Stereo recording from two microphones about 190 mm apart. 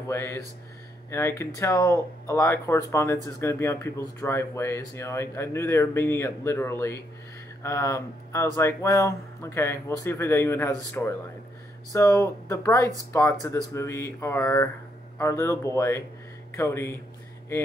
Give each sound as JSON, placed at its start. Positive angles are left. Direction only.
{"t": 0.1, "sound": "speech", "side_deg": 15}